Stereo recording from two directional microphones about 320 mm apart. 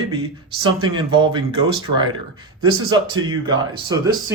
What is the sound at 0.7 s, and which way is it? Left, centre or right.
Speech, centre.